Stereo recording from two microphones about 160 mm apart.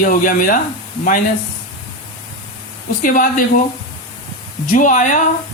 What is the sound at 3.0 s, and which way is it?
Speech, 55° left (ahead or behind).